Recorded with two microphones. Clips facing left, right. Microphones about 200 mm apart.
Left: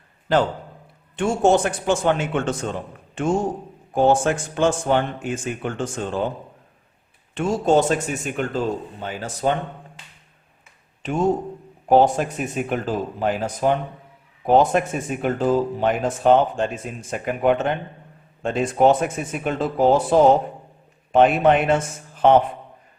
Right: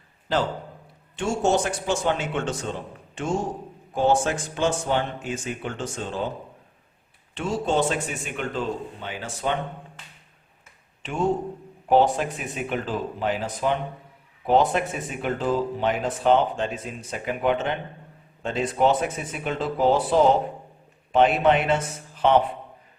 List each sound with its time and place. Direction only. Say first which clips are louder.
1.1 s a man's voice: left 5 dB; 55° left (ahead or behind)
3.9 s speech: left 4 dB; 50° left (ahead or behind)
7.3 s speech: left 6 dB; 45° left (ahead or behind)
11.0 s speech: left 3 dB; 40° left (ahead or behind)